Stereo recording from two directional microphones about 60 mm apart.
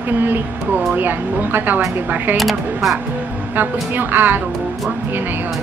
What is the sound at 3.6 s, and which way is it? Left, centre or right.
Speech, right.